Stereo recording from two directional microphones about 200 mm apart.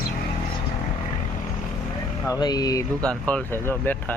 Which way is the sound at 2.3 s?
20° left (ahead or behind).